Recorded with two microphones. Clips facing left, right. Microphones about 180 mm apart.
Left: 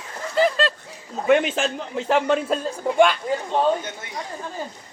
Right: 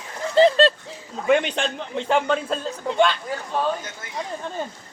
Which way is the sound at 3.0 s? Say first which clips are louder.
Left 3 dB; 15° left (ahead or behind).